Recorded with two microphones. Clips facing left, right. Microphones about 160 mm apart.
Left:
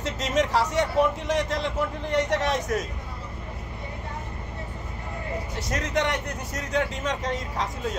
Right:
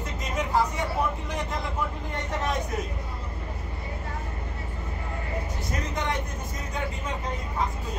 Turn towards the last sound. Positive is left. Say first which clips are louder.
# left 1 dB
turn(degrees=90)